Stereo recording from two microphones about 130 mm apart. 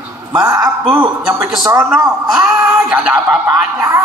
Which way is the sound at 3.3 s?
25° right (ahead or behind).